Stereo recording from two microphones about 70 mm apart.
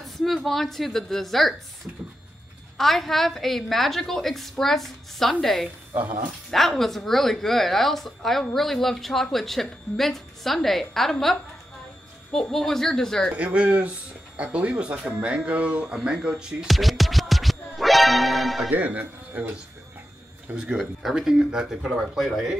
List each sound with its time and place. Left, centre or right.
0.0 s a woman's voice: centre
2.8 s a woman's voice: centre
13.3 s speech: centre
16.7 s music: centre
18.7 s speech: right
20.5 s a woman's voice: centre